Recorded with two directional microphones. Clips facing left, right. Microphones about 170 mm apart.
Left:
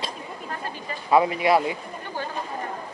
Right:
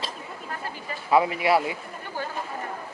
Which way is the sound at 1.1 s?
25° left (ahead or behind).